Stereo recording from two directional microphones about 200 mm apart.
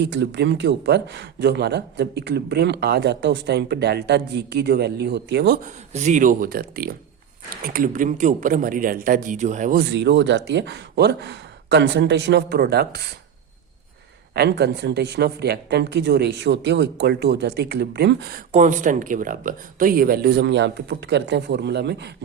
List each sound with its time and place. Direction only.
0.0 s speech: 65° right (ahead or behind)
5.6 s a man's voice: 35° right (ahead or behind)
9.8 s speech: 60° right (ahead or behind)
14.3 s speech: 55° right (ahead or behind)